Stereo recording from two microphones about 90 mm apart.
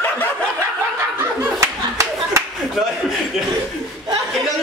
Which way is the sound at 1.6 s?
35° right (ahead or behind).